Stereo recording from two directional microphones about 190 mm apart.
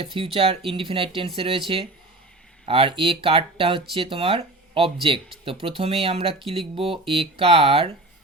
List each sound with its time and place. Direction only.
0.0 s speech: 30° right (ahead or behind)